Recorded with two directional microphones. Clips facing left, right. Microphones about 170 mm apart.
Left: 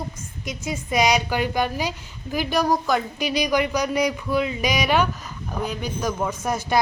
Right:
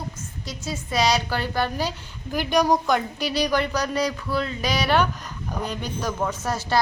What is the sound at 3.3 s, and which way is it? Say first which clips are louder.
Speech: left 1 dB; 15° left (ahead or behind).